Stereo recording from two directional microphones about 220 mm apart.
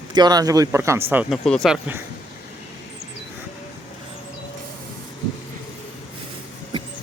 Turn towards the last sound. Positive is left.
turn(degrees=-20)  # may be behind; listen again after turning